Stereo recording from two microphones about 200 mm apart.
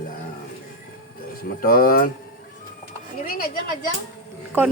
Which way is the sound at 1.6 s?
45° left (ahead or behind).